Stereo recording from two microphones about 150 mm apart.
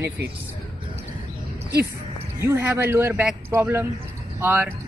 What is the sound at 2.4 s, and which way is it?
Speech, 15° right (ahead or behind).